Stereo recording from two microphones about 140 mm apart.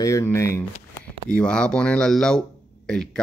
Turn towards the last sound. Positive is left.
turn(degrees=5)  # may be behind; listen again after turning